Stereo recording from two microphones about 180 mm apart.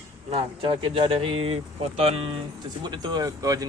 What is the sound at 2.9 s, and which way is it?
Speech, 25° right (ahead or behind).